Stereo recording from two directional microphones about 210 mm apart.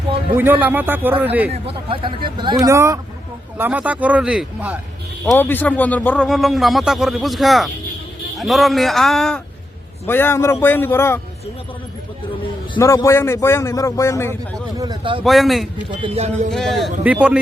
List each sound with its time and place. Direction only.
0.3 s speech: 10° right (ahead or behind)
1.5 s speech: 25° right (ahead or behind); by 4.8 s 5° right (ahead or behind)
5.2 s a man's voice: 10° left (ahead or behind)
12.7 s a man's voice: 15° left (ahead or behind)
14.8 s speech: 20° right (ahead or behind)
15.2 s speech: centre (ahead or behind)
16.0 s speech: 30° right (ahead or behind)
16.5 s speech: centre (ahead or behind)